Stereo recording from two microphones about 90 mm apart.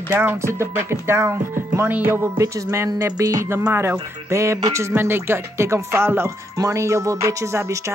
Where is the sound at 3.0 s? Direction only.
35° right (ahead or behind).